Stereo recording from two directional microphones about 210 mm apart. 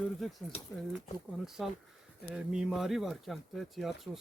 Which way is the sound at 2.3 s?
5° right (ahead or behind).